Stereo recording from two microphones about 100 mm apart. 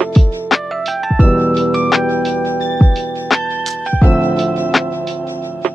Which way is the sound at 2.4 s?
20° left (ahead or behind).